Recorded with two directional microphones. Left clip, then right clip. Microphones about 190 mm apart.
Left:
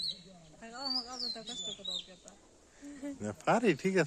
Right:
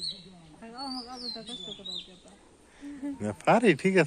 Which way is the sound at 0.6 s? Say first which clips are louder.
Even; 25° left (ahead or behind).